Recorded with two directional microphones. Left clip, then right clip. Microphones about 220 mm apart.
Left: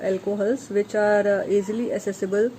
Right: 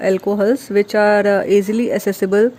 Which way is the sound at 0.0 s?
40° right (ahead or behind).